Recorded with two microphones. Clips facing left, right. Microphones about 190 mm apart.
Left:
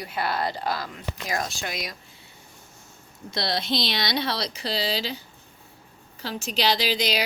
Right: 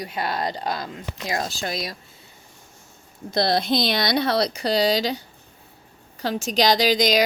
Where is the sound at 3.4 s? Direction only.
50° right (ahead or behind).